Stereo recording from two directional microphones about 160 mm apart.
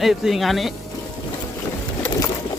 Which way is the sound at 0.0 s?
Centre (ahead or behind).